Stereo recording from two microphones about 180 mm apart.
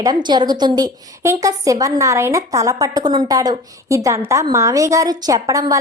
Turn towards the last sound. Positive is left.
turn(degrees=-20)  # may be behind; listen again after turning